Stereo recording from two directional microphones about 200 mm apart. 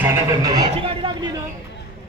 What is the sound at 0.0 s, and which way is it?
Speech, 15° right (ahead or behind).